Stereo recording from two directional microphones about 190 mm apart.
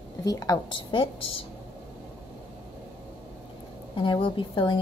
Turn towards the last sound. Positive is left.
turn(degrees=25)  # may be behind; listen again after turning